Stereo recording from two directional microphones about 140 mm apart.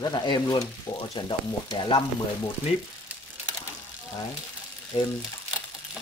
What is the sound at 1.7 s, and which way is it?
Frying, 30° left (ahead or behind).